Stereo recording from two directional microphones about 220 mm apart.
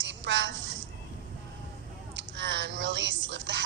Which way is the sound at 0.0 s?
55° right (ahead or behind).